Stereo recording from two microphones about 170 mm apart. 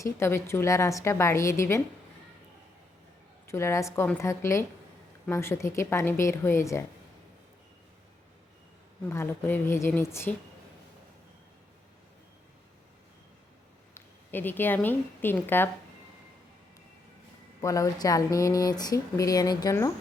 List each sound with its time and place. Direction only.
0.0 s a woman's voice: 15° left (ahead or behind)
3.4 s a woman's voice: 15° left (ahead or behind)
9.0 s a woman's voice: 15° left (ahead or behind)
13.9 s a woman's voice: 10° left (ahead or behind)
17.6 s speech: 20° left (ahead or behind)